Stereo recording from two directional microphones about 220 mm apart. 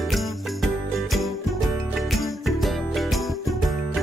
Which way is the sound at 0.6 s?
Centre (ahead or behind).